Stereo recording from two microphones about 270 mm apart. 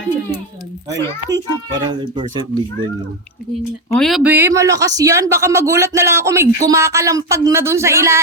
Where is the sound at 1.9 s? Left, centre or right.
Centre.